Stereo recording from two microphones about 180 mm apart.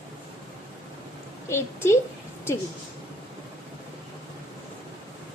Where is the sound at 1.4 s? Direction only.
15° left (ahead or behind).